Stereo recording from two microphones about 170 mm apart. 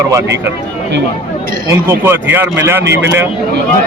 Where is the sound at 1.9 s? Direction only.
15° right (ahead or behind).